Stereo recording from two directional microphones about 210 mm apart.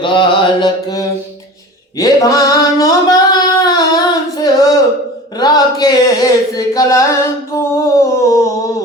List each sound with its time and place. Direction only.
0.0 s music: 20° left (ahead or behind)
2.0 s a sound: 15° left (ahead or behind)
5.4 s singing: 20° left (ahead or behind)